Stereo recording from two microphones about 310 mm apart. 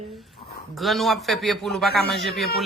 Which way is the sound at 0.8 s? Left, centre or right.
Centre.